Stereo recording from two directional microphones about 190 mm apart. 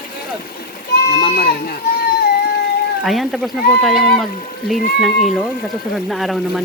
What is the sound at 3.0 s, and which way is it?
Speech, centre (ahead or behind).